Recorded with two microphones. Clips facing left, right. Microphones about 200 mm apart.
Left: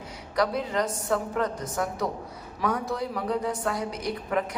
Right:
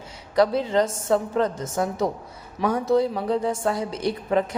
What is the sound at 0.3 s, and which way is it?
A woman's voice, 25° right (ahead or behind).